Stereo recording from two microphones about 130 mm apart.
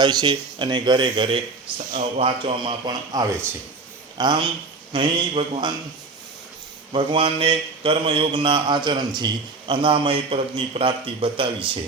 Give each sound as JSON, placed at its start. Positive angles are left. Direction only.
{"t": 0.0, "sound": "speech", "side_deg": -35}
{"t": 1.9, "sound": "a man's voice", "side_deg": -70}
{"t": 2.2, "sound": "speech", "side_deg": -40}
{"t": 6.9, "sound": "speech", "side_deg": -45}